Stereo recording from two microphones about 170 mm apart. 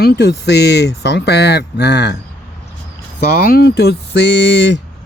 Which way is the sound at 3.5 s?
65° left (ahead or behind).